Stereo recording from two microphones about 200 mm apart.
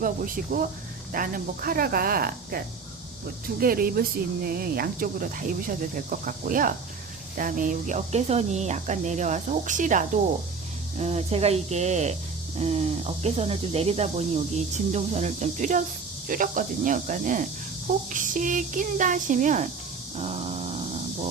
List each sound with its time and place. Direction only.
0.0 s speech: 45° right (ahead or behind)
3.6 s speech: 45° right (ahead or behind)
20.1 s dog: 35° right (ahead or behind)